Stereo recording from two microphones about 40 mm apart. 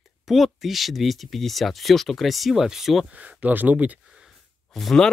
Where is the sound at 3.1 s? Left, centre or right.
Right.